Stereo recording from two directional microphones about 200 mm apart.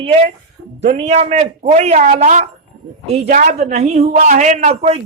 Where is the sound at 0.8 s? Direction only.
35° right (ahead or behind).